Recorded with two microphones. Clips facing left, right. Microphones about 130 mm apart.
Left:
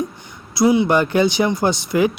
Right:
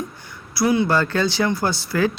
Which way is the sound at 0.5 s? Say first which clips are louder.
Left 4 dB; 20° left (ahead or behind).